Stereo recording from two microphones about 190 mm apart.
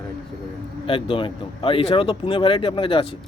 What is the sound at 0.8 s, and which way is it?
Speech, 30° left (ahead or behind).